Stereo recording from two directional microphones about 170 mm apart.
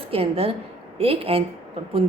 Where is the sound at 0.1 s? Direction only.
35° right (ahead or behind).